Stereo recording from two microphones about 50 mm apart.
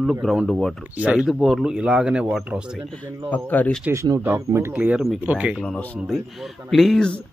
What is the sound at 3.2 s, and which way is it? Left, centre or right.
Speech, left.